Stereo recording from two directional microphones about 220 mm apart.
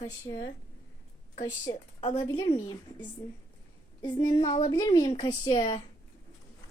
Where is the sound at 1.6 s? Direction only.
20° left (ahead or behind).